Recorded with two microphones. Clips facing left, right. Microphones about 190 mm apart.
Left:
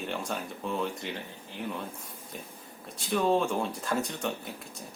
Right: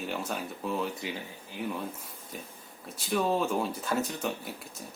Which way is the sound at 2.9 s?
Centre (ahead or behind).